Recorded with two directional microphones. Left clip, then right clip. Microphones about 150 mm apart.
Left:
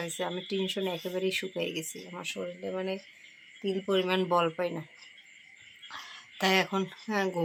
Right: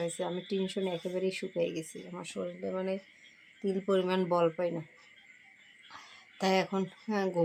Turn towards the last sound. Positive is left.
turn(degrees=0)  # may be behind; listen again after turning